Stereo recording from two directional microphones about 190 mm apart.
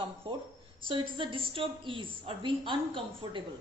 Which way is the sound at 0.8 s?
25° right (ahead or behind).